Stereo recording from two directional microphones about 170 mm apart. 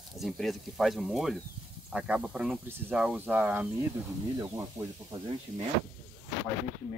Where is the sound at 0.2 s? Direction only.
Centre (ahead or behind).